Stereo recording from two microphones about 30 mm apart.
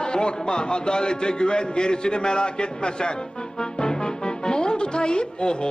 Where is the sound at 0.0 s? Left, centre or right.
Left.